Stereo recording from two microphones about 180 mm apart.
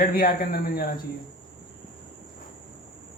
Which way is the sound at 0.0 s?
50° left (ahead or behind).